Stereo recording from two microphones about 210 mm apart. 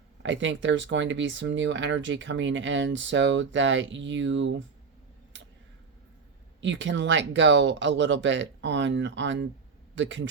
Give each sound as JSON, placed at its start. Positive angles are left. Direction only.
{"t": 0.2, "sound": "speech", "side_deg": -60}
{"t": 6.6, "sound": "speech", "side_deg": -60}